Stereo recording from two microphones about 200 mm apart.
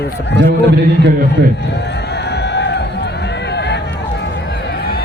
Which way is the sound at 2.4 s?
55° left (ahead or behind).